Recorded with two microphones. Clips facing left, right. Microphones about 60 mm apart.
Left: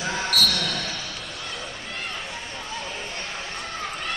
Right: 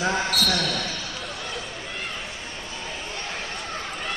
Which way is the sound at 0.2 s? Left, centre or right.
Centre.